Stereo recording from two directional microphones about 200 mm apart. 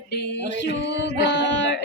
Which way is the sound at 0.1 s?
55° left (ahead or behind).